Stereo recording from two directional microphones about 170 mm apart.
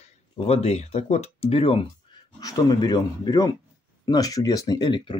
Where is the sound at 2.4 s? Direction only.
20° left (ahead or behind).